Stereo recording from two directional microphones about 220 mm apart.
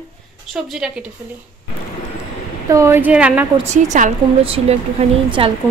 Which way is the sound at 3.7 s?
35° right (ahead or behind).